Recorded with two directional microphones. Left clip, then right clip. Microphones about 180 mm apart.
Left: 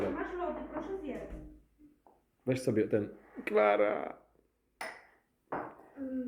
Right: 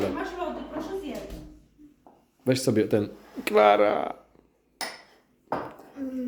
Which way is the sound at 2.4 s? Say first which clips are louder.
Right 7 dB; 15° right (ahead or behind).